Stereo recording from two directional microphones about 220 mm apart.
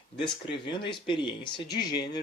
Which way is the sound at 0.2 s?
20° left (ahead or behind).